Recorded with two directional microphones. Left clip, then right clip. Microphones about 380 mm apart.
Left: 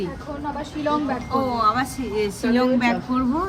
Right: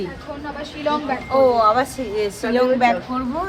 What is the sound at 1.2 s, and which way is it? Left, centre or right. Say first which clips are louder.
A woman's voice: right 7 dB; centre.